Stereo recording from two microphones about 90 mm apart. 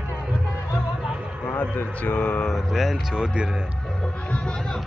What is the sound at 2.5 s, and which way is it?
Speech, centre (ahead or behind).